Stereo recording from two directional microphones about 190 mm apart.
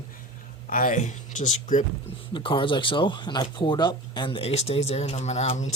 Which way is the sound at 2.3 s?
25° left (ahead or behind).